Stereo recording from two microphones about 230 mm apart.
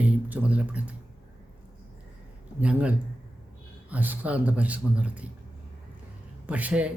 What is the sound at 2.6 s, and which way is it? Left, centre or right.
A man's voice, centre.